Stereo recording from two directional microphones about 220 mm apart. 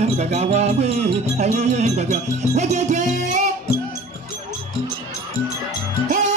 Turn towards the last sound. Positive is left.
turn(degrees=-35)  # may be behind; listen again after turning